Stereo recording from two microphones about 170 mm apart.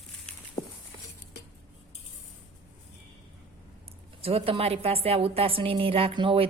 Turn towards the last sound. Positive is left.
turn(degrees=-30)  # may be behind; listen again after turning